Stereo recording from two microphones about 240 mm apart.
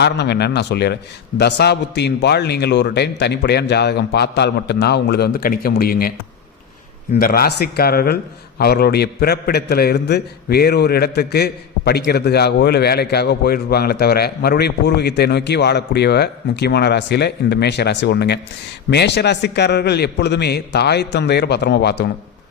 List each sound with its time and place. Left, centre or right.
0.0 s a man's voice: left
7.2 s a man's voice: left